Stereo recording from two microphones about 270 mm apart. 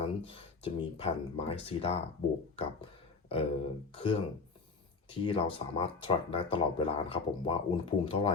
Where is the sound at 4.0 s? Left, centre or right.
Centre.